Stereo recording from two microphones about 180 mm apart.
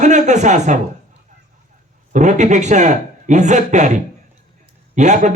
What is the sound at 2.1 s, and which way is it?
A man's voice, 45° right (ahead or behind).